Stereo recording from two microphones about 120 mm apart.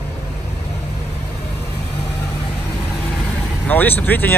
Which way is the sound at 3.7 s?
15° left (ahead or behind).